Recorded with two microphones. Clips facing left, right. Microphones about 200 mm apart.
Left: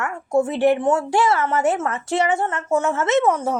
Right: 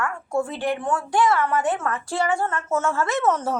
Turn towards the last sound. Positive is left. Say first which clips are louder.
# left 4 dB
turn(degrees=10)  # may be behind; listen again after turning